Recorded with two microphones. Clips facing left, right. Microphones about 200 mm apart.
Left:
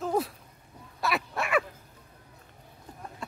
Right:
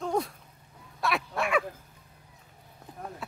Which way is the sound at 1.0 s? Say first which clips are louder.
Right 1 dB; centre (ahead or behind).